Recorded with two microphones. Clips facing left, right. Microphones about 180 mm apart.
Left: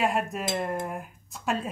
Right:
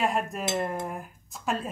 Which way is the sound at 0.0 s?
Centre (ahead or behind).